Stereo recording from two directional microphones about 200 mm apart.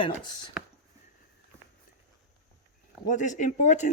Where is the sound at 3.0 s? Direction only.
40° left (ahead or behind).